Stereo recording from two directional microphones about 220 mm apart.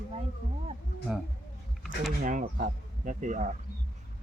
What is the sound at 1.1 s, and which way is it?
Speech, 5° right (ahead or behind).